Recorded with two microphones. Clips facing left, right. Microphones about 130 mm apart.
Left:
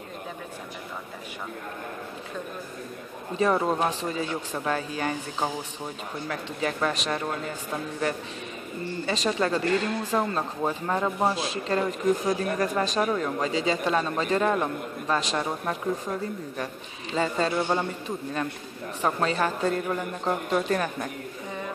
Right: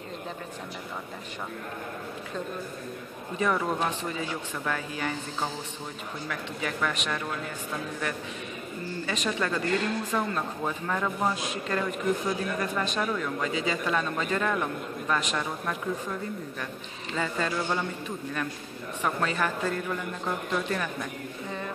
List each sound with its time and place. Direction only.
3.3 s speech: 30° left (ahead or behind)
6.2 s speech: 35° left (ahead or behind)
9.0 s speech: 35° left (ahead or behind)
19.0 s speech: 30° left (ahead or behind)